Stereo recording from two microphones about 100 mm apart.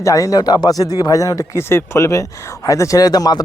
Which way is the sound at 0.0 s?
35° left (ahead or behind).